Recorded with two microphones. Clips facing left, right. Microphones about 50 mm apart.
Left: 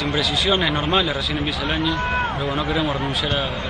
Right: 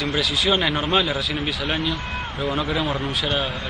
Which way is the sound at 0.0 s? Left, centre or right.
Centre.